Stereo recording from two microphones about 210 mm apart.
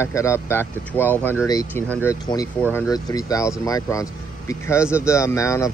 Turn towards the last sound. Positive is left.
turn(degrees=15)  # may be behind; listen again after turning